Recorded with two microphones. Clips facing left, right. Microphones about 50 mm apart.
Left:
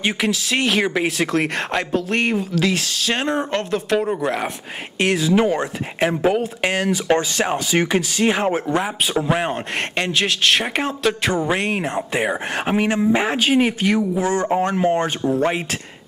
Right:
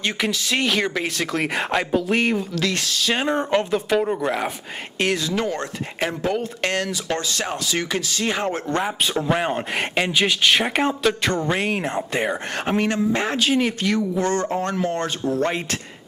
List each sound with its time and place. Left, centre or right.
0.2 s speech: centre
5.3 s speech: centre
6.9 s speech: left